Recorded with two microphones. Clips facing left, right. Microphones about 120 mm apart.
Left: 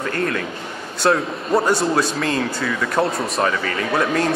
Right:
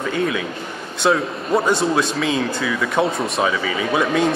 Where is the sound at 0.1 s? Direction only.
5° right (ahead or behind).